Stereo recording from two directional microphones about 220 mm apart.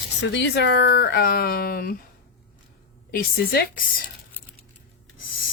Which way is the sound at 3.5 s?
45° left (ahead or behind).